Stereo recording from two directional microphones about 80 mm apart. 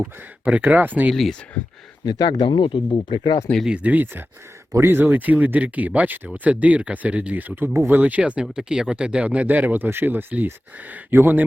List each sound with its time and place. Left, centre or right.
0.0 s speech: centre
1.1 s speech: centre
2.0 s speech: left
3.7 s speech: centre
4.7 s speech: right
4.9 s speech: right